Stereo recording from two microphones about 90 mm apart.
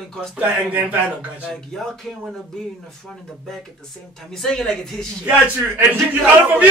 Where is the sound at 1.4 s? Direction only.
5° left (ahead or behind).